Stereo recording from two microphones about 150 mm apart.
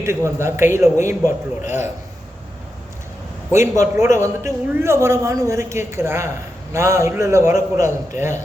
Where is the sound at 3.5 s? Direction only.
20° right (ahead or behind).